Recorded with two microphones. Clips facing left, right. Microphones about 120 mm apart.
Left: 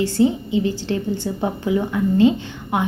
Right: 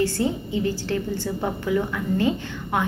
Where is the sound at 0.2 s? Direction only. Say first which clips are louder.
Left 6 dB; 20° left (ahead or behind).